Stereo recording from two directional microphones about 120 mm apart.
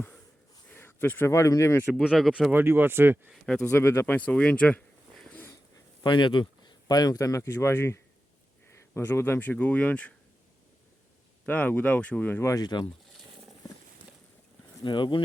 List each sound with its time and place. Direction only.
0.7 s speech: 20° left (ahead or behind)
1.9 s speech: centre (ahead or behind)
2.5 s speech: 20° right (ahead or behind)
3.2 s speech: 5° left (ahead or behind)
3.8 s speech: 20° left (ahead or behind)
6.0 s speech: 40° left (ahead or behind); by 10.1 s 10° left (ahead or behind)
11.4 s speech: 15° left (ahead or behind); by 12.9 s 40° left (ahead or behind)
14.8 s speech: 40° left (ahead or behind)